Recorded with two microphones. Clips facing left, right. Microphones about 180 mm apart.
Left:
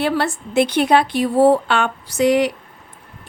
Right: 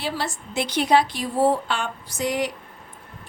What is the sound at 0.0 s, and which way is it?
A woman's voice, 60° left (ahead or behind).